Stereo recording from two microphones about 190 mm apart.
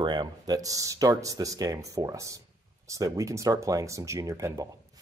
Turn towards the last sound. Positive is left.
turn(degrees=-15)  # may be behind; listen again after turning